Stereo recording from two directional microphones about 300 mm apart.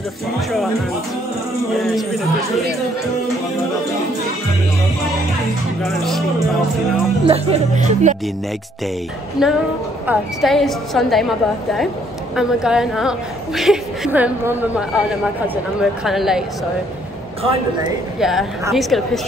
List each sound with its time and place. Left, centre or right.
1.8 s a woman's voice: centre
5.8 s a woman's voice: centre
7.2 s speech: centre
9.4 s a woman's voice: centre
17.4 s speech: centre
18.2 s a woman's voice: centre